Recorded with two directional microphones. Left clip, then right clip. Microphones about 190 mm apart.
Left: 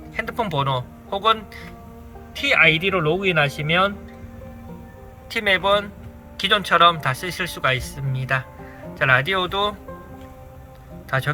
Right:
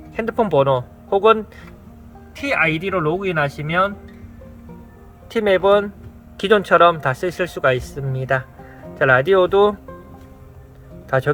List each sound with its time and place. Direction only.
0.2 s speech: 45° right (ahead or behind)
2.3 s speech: 25° right (ahead or behind)
5.3 s speech: 35° right (ahead or behind)
11.1 s speech: 40° right (ahead or behind)